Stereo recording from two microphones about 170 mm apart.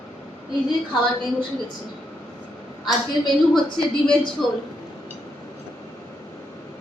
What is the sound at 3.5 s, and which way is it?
Speech, 5° left (ahead or behind).